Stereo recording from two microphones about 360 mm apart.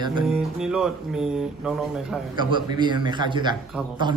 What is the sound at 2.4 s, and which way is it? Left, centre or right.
A man's voice, centre.